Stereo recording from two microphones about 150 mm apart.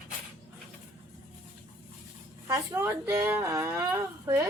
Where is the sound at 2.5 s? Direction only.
20° right (ahead or behind).